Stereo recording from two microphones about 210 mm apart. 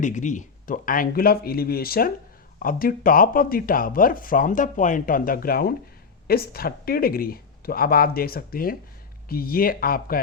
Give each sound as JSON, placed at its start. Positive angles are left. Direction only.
{"t": 0.0, "sound": "speech", "side_deg": 35}